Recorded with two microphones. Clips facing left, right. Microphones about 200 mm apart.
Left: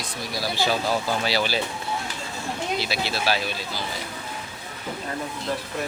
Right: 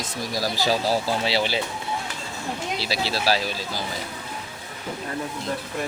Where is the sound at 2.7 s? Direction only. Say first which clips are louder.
Right 2 dB; 35° right (ahead or behind).